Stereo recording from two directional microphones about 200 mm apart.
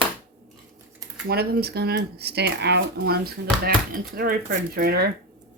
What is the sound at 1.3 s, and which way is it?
Speech, 50° right (ahead or behind).